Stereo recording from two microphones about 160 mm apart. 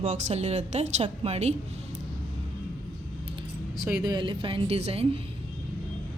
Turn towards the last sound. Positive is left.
turn(degrees=-40)  # may be behind; listen again after turning